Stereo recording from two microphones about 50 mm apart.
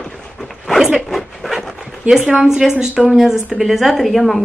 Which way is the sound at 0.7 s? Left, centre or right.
Centre.